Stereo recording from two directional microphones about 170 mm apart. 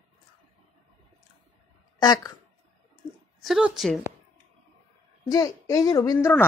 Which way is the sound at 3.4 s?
Centre (ahead or behind).